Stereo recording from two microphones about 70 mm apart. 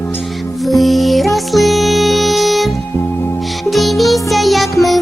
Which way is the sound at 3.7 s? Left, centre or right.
Centre.